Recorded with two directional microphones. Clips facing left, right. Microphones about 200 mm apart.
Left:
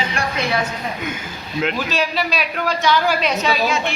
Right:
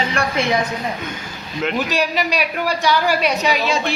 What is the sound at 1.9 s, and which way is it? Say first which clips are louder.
A woman's voice: right 1 dB; 15° right (ahead or behind).